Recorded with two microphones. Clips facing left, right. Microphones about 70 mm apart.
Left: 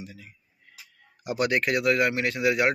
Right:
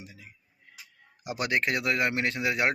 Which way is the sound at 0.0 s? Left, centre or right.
Centre.